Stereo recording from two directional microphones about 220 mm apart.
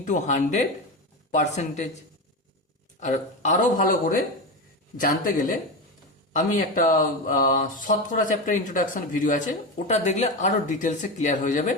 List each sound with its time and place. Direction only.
0.0 s speech: 35° left (ahead or behind)
3.0 s speech: 35° left (ahead or behind)